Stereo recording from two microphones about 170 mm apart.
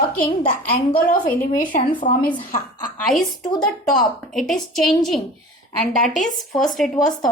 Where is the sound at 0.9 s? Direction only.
55° left (ahead or behind).